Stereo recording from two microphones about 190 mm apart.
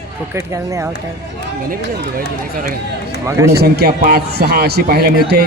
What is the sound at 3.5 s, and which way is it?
A man's voice, 55° right (ahead or behind).